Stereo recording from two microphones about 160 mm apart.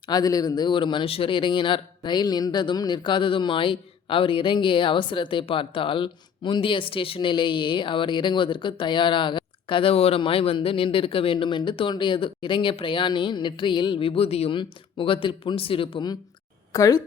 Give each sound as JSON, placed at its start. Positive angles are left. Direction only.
{"t": 0.1, "sound": "speech", "side_deg": 25}